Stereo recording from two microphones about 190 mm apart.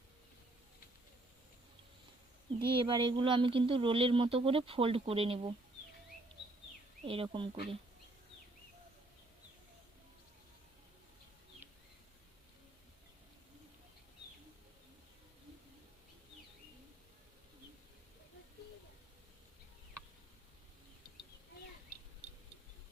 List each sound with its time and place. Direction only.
2.7 s speech: 25° right (ahead or behind)
7.0 s speech: 30° right (ahead or behind)